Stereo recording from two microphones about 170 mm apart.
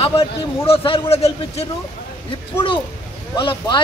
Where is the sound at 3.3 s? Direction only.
25° left (ahead or behind).